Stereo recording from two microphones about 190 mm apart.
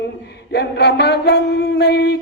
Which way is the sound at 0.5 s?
60° left (ahead or behind).